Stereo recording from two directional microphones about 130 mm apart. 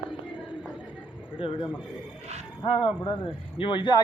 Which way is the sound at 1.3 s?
40° left (ahead or behind).